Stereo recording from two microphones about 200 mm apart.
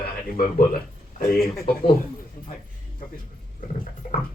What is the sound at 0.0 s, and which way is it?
Speech, 45° left (ahead or behind).